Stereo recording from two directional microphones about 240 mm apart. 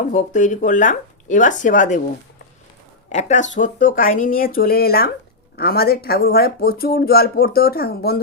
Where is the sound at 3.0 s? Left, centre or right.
Left.